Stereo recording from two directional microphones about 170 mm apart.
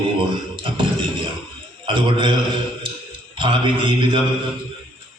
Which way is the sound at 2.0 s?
30° right (ahead or behind).